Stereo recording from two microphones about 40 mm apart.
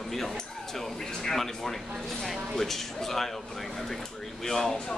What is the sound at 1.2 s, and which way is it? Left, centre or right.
Speech, centre.